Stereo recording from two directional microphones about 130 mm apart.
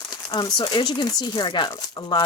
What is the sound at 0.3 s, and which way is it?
Speech, 35° left (ahead or behind).